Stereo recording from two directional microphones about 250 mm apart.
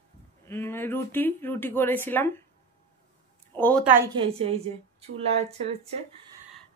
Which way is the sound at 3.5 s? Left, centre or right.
Centre.